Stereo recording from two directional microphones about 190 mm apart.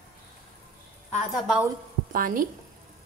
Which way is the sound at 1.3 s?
5° right (ahead or behind).